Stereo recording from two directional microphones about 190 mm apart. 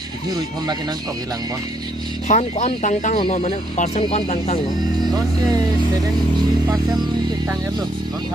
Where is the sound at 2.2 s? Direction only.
35° left (ahead or behind).